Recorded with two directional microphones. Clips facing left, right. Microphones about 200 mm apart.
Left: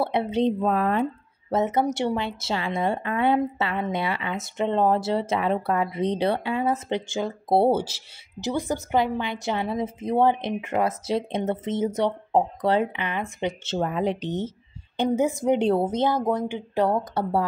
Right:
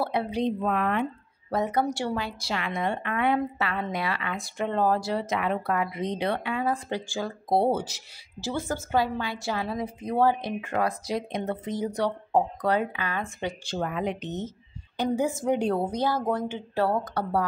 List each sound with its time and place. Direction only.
0.0 s a woman's voice: 25° left (ahead or behind)
1.5 s a woman's voice: 25° left (ahead or behind)
8.4 s a woman's voice: 20° left (ahead or behind)
15.0 s a woman's voice: 20° left (ahead or behind)